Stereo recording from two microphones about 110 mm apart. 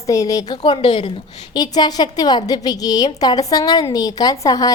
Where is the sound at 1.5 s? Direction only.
40° left (ahead or behind).